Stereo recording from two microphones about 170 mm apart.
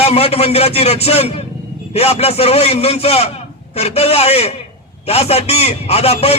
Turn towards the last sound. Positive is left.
turn(degrees=35)  # may be behind; listen again after turning